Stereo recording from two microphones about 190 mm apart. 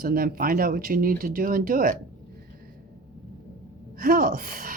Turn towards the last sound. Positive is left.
turn(degrees=-50)  # may be behind; listen again after turning